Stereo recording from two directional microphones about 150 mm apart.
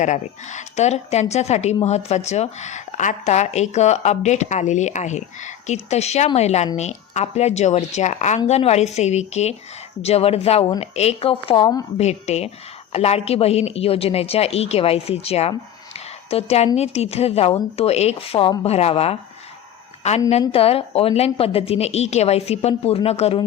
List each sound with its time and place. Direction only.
0.0 s a woman's voice: 55° left (ahead or behind)